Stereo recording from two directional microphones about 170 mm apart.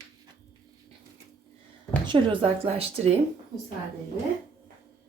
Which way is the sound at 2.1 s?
30° right (ahead or behind).